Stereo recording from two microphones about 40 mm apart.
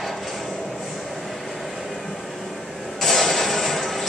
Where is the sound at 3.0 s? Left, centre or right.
Centre.